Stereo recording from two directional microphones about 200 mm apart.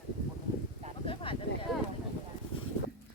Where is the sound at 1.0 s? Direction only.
25° left (ahead or behind).